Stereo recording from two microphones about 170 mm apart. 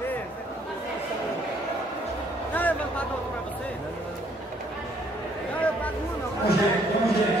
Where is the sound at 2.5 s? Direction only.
10° left (ahead or behind).